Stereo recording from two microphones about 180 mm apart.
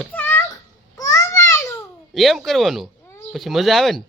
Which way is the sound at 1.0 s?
15° left (ahead or behind).